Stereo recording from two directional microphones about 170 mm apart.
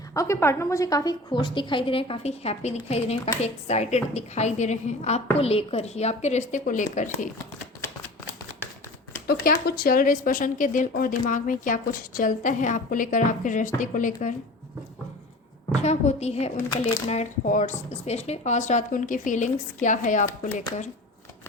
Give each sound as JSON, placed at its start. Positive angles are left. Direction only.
{"t": 0.1, "sound": "a woman's voice", "side_deg": 15}
{"t": 9.2, "sound": "speech", "side_deg": 65}
{"t": 15.8, "sound": "speech", "side_deg": 40}